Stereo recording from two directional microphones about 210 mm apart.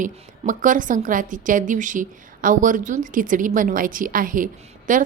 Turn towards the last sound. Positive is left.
turn(degrees=-40)  # may be behind; listen again after turning